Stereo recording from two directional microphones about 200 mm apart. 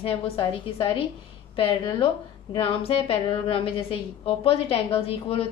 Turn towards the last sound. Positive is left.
turn(degrees=30)  # may be behind; listen again after turning